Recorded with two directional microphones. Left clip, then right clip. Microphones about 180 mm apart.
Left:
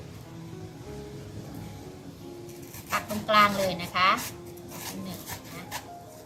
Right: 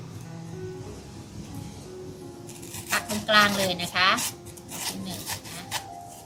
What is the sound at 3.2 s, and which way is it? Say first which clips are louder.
Speech: right 1 dB; 15° left (ahead or behind).